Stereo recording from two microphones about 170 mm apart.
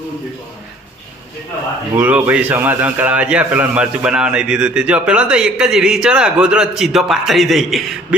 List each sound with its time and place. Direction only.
2.0 s a man's voice: 10° right (ahead or behind)